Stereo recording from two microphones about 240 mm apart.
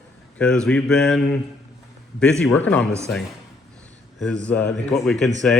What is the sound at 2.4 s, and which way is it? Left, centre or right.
Speech, centre.